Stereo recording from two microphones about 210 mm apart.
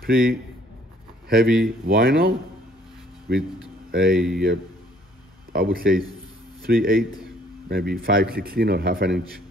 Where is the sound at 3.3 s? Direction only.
50° right (ahead or behind).